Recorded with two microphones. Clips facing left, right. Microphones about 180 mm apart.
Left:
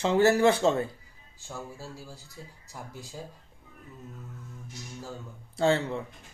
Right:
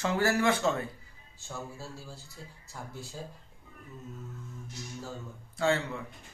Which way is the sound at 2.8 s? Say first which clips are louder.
Left 1 dB; 15° left (ahead or behind).